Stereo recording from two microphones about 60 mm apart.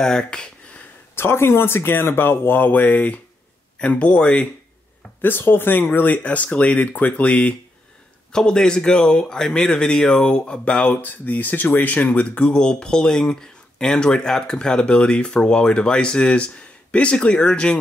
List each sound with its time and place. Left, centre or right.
0.0 s speech: centre
1.1 s speech: left; by 4.5 s centre
5.2 s speech: left
8.3 s speech: centre
10.9 s speech: left; by 17.7 s centre